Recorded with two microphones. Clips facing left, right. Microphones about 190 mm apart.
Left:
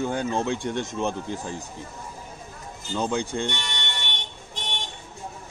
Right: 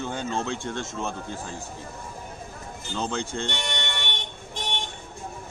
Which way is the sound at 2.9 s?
10° left (ahead or behind).